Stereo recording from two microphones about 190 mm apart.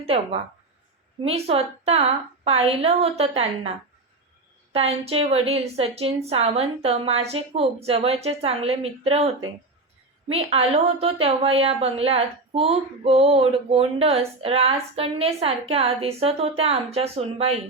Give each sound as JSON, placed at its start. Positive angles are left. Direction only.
{"t": 0.0, "sound": "a woman's voice", "side_deg": -30}
{"t": 1.5, "sound": "a woman's voice", "side_deg": -30}
{"t": 4.7, "sound": "a woman's voice", "side_deg": -30}